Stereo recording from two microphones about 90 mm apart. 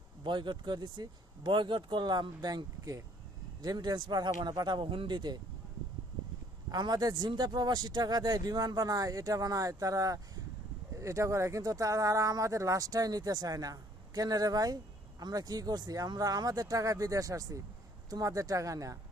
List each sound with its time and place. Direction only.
0.3 s speech: 60° right (ahead or behind)
1.5 s speech: 60° right (ahead or behind)
3.6 s speech: 50° right (ahead or behind)
6.7 s speech: 45° right (ahead or behind)